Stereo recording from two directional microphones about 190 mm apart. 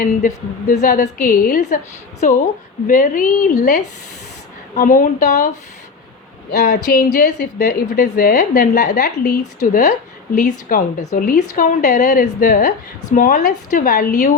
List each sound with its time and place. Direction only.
0.7 s a woman's voice: 40° left (ahead or behind)
6.6 s a woman's voice: 45° left (ahead or behind)